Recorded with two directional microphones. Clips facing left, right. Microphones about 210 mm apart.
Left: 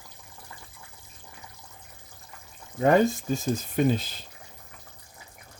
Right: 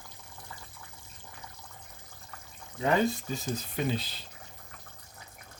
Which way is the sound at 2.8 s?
50° left (ahead or behind).